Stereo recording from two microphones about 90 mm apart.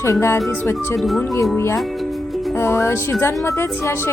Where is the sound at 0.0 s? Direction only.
30° left (ahead or behind).